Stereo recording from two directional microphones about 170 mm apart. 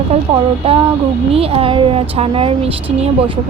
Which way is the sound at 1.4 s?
35° right (ahead or behind).